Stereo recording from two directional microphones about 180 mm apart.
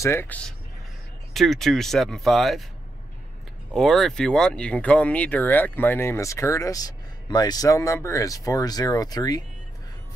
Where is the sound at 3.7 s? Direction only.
Centre (ahead or behind).